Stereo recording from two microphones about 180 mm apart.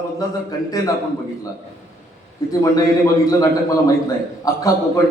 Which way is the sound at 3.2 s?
20° left (ahead or behind).